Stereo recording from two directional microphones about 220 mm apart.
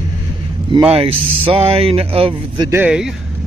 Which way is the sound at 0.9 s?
25° right (ahead or behind).